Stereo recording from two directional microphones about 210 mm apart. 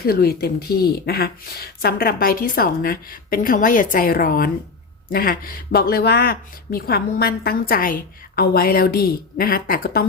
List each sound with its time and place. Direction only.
0.0 s speech: 45° left (ahead or behind)